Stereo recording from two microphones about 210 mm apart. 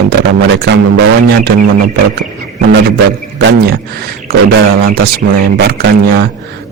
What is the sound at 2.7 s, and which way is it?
A man's voice, 55° right (ahead or behind).